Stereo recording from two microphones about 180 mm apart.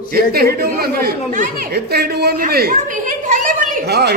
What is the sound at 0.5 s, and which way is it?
Speech, 60° right (ahead or behind).